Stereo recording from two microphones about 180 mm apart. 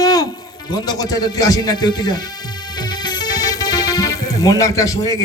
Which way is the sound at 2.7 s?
25° left (ahead or behind).